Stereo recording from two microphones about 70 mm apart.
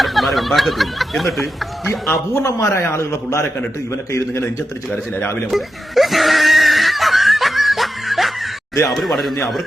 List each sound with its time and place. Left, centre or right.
0.0 s speech: centre
1.9 s a man's voice: left
5.1 s speech: left
5.5 s screaming: centre
8.9 s speech: centre